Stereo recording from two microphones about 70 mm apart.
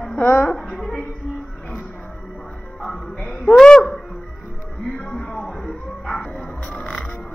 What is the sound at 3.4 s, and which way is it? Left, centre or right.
Speech, centre.